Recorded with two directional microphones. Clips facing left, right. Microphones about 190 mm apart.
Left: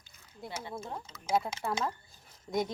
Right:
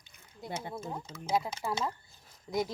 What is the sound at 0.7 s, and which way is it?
A woman's voice, centre (ahead or behind).